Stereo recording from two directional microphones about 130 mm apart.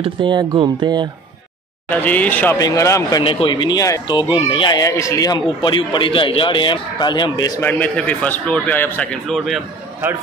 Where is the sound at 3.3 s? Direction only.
40° left (ahead or behind).